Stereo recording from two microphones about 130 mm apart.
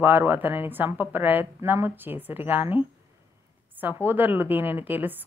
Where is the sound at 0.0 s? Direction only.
15° right (ahead or behind).